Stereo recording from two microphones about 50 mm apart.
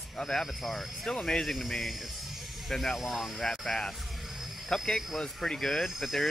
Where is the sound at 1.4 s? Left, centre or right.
Centre.